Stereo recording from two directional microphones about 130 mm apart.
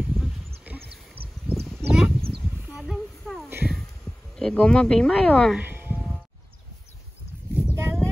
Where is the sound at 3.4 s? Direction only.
15° right (ahead or behind).